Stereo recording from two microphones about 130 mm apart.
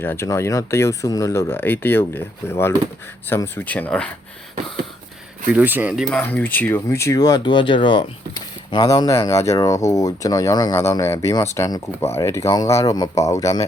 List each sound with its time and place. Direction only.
0.0 s speech: 20° left (ahead or behind)
5.5 s speech: 15° right (ahead or behind)
6.1 s speech: 10° left (ahead or behind); by 13.7 s 25° left (ahead or behind)